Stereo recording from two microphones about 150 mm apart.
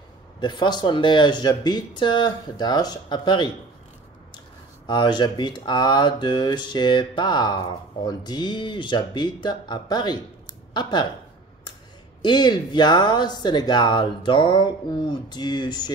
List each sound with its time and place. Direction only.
0.4 s speech: 30° left (ahead or behind)
4.8 s speech: 30° left (ahead or behind)
10.7 s a sound: 30° left (ahead or behind)
12.2 s speech: 30° left (ahead or behind)